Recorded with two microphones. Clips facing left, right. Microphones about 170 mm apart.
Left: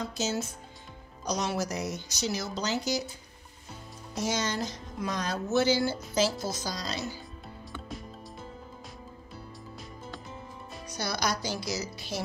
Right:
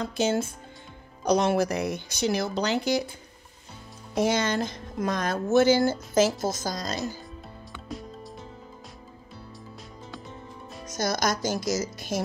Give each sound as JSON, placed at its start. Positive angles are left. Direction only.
{"t": 0.0, "sound": "speech", "side_deg": -55}
{"t": 4.1, "sound": "speech", "side_deg": -55}
{"t": 10.9, "sound": "speech", "side_deg": -45}